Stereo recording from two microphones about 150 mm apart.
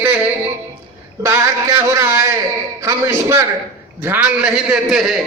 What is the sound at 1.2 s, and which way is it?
A man's voice, 20° right (ahead or behind).